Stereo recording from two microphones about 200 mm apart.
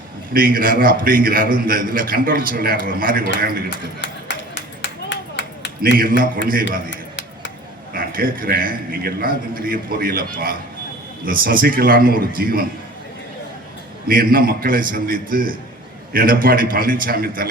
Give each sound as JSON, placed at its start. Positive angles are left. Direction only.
{"t": 0.3, "sound": "a man's voice", "side_deg": -45}
{"t": 4.0, "sound": "a sound", "side_deg": 65}
{"t": 6.0, "sound": "a man's voice", "side_deg": -45}
{"t": 7.9, "sound": "a man's voice", "side_deg": -45}
{"t": 14.1, "sound": "a man's voice", "side_deg": -45}